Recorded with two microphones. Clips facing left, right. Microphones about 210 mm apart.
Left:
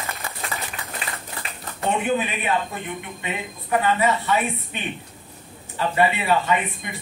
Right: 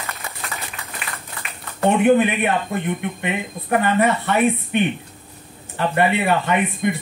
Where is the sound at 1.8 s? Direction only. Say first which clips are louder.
Right 8 dB; 60° right (ahead or behind).